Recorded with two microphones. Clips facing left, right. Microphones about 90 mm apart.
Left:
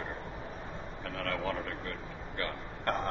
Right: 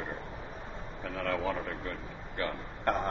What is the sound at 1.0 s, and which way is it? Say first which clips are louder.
A man's voice: right 3 dB; 15° right (ahead or behind).